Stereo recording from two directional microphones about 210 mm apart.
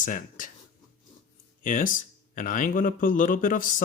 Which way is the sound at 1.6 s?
40° left (ahead or behind).